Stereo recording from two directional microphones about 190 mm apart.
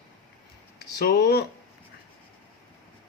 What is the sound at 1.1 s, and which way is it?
Speech, 55° left (ahead or behind).